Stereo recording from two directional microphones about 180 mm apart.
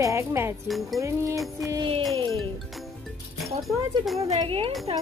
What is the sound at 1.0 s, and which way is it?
Music, 20° right (ahead or behind).